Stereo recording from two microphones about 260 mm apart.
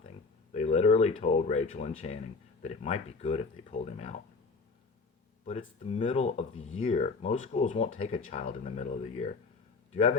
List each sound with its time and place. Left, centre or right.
0.5 s speech: left
5.5 s speech: left